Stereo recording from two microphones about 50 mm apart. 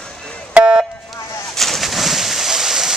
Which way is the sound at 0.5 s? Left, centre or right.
Right.